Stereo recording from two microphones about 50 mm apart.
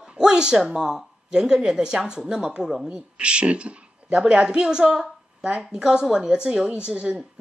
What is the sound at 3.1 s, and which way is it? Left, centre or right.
Speech, right.